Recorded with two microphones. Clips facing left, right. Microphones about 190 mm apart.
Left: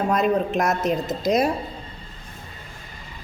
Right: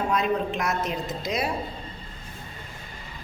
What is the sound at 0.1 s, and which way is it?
A woman's voice, 45° left (ahead or behind).